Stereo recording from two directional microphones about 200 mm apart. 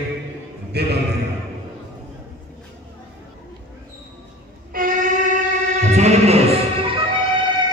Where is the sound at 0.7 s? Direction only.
55° right (ahead or behind).